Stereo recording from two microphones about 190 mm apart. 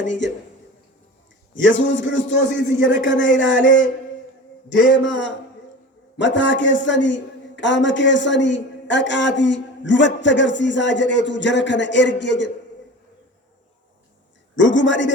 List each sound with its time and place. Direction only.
0.0 s a man's voice: 70° left (ahead or behind)
1.5 s a woman's voice: 75° left (ahead or behind)
14.5 s a woman's voice: 70° left (ahead or behind)